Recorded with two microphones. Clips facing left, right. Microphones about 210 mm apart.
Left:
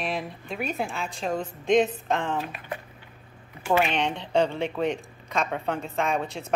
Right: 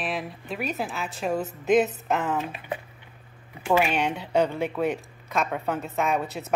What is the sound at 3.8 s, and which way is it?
Speech, 5° right (ahead or behind).